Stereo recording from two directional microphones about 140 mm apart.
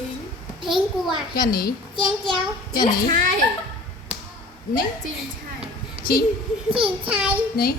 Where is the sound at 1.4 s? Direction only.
90° left.